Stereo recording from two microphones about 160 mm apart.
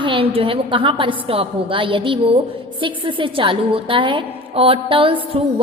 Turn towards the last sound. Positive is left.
turn(degrees=-35)  # may be behind; listen again after turning